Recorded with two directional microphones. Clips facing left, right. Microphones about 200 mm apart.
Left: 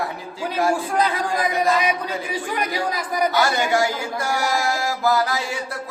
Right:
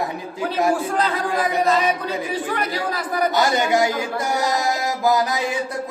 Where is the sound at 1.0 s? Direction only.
15° left (ahead or behind).